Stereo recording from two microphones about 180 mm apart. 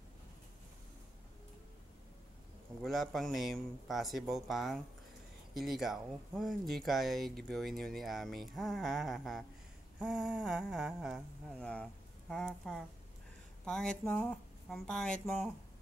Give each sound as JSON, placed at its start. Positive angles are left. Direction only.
{"t": 2.8, "sound": "speech", "side_deg": 0}